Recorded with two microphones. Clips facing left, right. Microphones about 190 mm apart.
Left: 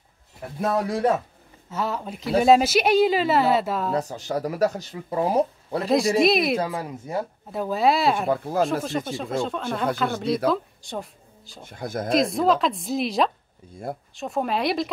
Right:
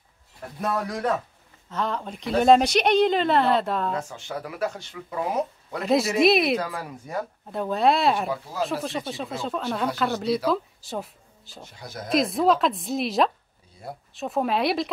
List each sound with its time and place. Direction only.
0.6 s speech: 30° left (ahead or behind)
1.7 s a woman's voice: 10° left (ahead or behind)
3.9 s speech: 40° left (ahead or behind)
5.9 s a woman's voice: centre (ahead or behind)
6.6 s speech: 25° left (ahead or behind)
7.5 s a woman's voice: 5° left (ahead or behind)
8.3 s speech: 55° left (ahead or behind)
8.8 s a woman's voice: centre (ahead or behind)
11.6 s speech: 55° left (ahead or behind)
12.1 s a woman's voice: centre (ahead or behind)